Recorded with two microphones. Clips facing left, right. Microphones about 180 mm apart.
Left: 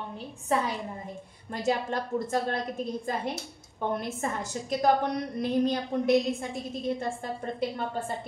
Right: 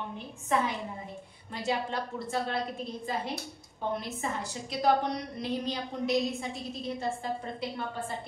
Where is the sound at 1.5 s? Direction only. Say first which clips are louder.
Left 4 dB; 45° left (ahead or behind).